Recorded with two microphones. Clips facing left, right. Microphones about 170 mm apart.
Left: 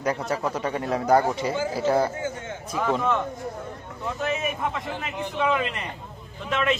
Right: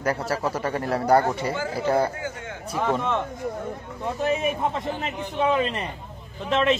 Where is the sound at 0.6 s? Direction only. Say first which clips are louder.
Right 1 dB; 10° left (ahead or behind).